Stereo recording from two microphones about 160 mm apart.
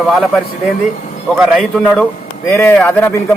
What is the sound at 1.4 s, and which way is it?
Speech, centre (ahead or behind).